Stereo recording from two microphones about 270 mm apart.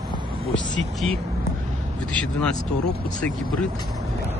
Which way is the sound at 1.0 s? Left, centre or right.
Right.